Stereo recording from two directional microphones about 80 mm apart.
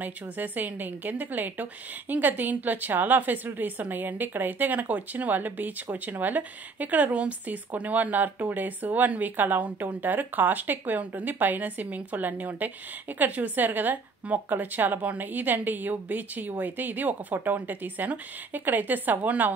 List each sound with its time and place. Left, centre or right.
0.0 s a woman's voice: right